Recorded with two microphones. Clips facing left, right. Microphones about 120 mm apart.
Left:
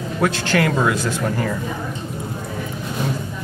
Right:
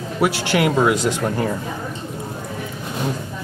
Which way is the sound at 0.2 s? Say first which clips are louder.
Right 1 dB; 10° right (ahead or behind).